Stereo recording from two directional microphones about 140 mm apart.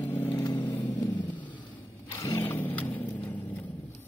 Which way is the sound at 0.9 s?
30° left (ahead or behind).